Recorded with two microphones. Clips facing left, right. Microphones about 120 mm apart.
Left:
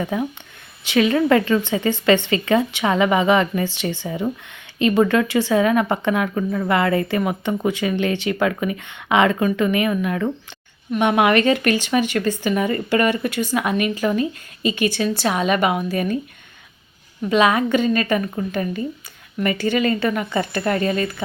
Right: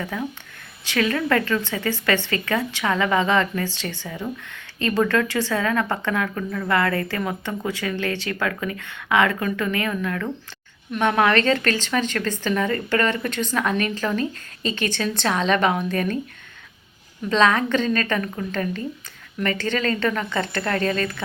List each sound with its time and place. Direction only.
0.0 s speech: 20° left (ahead or behind)
17.2 s speech: 10° left (ahead or behind)